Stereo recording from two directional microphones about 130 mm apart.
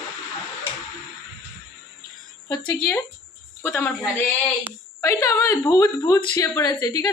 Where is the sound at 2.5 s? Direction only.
15° left (ahead or behind).